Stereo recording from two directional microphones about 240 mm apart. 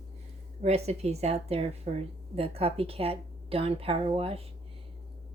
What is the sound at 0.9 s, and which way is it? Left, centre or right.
Speech, right.